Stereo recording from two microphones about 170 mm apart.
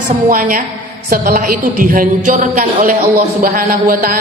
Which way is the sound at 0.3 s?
55° right (ahead or behind).